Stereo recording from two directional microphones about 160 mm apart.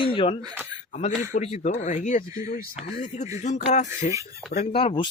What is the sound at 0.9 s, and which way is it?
Speech, 50° left (ahead or behind).